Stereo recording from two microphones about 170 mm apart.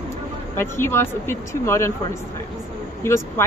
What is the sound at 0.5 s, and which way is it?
Speech, 15° left (ahead or behind).